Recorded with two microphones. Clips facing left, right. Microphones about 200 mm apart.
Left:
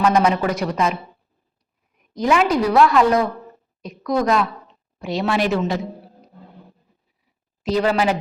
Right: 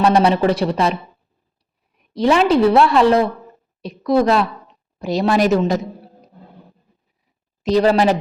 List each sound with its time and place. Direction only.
0.0 s speech: 30° right (ahead or behind)
2.1 s a woman's voice: 30° right (ahead or behind)
7.6 s speech: 35° right (ahead or behind)